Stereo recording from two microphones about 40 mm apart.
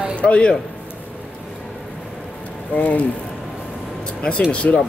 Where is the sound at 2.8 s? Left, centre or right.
Left.